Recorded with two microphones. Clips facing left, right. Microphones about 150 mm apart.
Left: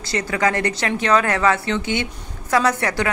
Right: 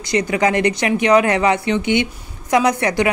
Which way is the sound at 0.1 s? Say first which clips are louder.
Right 4 dB; 15° right (ahead or behind).